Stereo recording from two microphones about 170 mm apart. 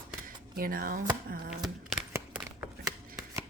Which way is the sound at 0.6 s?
55° right (ahead or behind).